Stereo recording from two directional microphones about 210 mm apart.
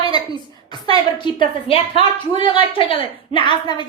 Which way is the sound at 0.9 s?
25° left (ahead or behind).